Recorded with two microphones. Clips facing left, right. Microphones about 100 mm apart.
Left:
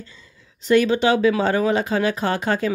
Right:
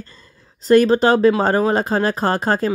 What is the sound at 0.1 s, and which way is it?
Speech, 40° right (ahead or behind).